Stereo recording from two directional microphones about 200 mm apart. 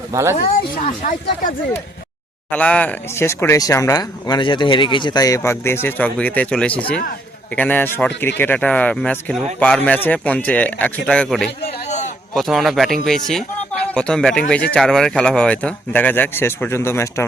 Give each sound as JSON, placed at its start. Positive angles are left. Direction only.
{"t": 0.1, "sound": "speech", "side_deg": -15}
{"t": 0.9, "sound": "speech", "side_deg": 40}
{"t": 2.5, "sound": "speech", "side_deg": 5}
{"t": 11.6, "sound": "a sound", "side_deg": 35}
{"t": 12.3, "sound": "speech", "side_deg": 0}